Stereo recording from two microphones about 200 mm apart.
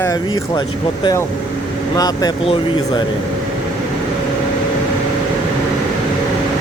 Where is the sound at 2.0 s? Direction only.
20° left (ahead or behind).